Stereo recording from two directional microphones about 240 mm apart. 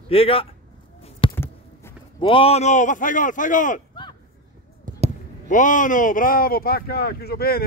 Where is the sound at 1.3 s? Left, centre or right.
Centre.